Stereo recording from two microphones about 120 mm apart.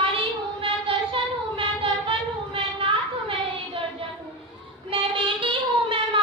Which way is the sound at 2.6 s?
45° right (ahead or behind).